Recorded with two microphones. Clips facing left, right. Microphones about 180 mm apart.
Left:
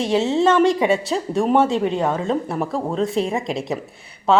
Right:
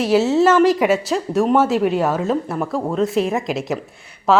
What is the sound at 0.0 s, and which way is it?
A woman's voice, 5° right (ahead or behind).